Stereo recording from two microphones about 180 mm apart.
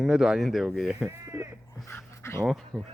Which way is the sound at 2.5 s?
Centre (ahead or behind).